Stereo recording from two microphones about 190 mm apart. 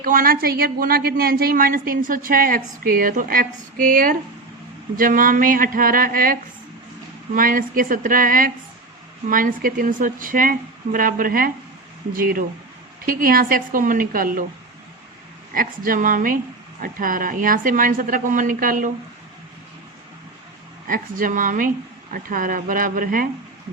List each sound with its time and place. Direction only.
0.0 s a woman's voice: 50° right (ahead or behind)
15.5 s a woman's voice: 45° right (ahead or behind)
20.8 s a woman's voice: 45° right (ahead or behind)